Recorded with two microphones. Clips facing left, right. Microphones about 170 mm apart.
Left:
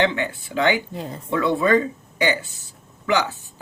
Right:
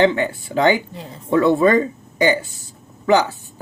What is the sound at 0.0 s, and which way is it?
Speech, 40° right (ahead or behind).